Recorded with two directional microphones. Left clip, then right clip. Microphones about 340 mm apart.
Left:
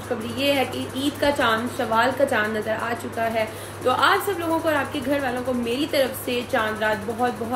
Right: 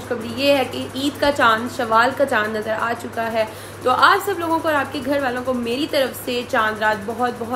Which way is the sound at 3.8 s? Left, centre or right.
Centre.